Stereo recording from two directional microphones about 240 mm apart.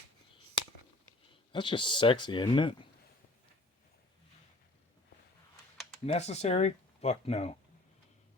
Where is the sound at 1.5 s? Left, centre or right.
Centre.